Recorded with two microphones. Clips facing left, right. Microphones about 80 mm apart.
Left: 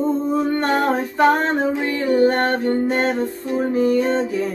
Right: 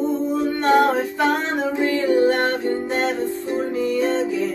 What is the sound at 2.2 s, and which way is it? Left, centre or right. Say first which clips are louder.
Music: left 2 dB; left.